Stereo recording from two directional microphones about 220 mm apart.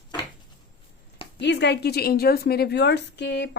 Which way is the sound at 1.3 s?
50° left (ahead or behind).